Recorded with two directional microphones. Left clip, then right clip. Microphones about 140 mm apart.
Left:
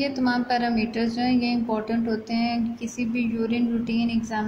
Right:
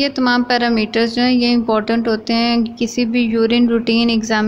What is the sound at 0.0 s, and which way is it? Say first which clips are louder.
Speech: right 9 dB; 35° right (ahead or behind).